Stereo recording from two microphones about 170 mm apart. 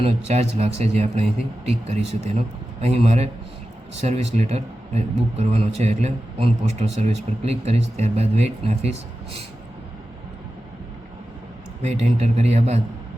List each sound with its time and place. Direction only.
0.0 s a man's voice: 40° right (ahead or behind)
11.8 s a man's voice: 40° right (ahead or behind)